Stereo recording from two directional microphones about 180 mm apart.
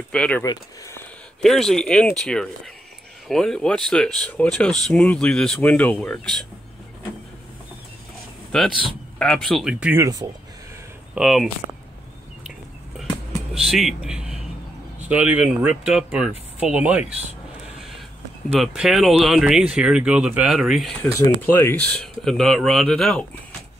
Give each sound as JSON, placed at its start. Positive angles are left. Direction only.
{"t": 0.1, "sound": "speech", "side_deg": 5}
{"t": 0.4, "sound": "speech", "side_deg": 15}
{"t": 1.4, "sound": "speech", "side_deg": 0}
{"t": 8.5, "sound": "speech", "side_deg": 0}
{"t": 11.1, "sound": "speech", "side_deg": -5}
{"t": 13.7, "sound": "speech", "side_deg": 0}
{"t": 18.6, "sound": "speech", "side_deg": 0}
{"t": 21.0, "sound": "speech", "side_deg": 15}
{"t": 22.0, "sound": "speech", "side_deg": 0}